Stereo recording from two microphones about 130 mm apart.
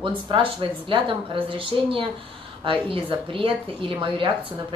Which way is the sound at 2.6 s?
40° right (ahead or behind).